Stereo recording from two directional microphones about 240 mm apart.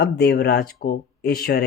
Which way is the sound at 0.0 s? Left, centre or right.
Left.